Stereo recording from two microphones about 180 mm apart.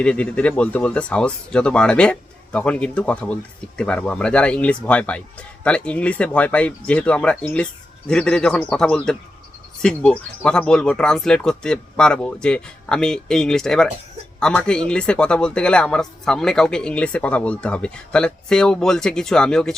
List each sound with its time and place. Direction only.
0.0 s a man's voice: 5° left (ahead or behind)